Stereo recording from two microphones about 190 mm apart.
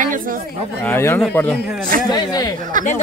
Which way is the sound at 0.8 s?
10° left (ahead or behind).